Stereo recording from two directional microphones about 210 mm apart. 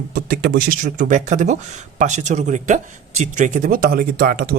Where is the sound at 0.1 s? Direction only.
45° right (ahead or behind).